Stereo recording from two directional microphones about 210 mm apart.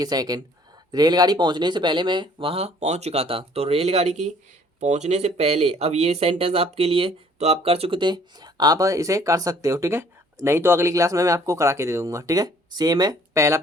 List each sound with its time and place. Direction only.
0.0 s speech: 20° right (ahead or behind)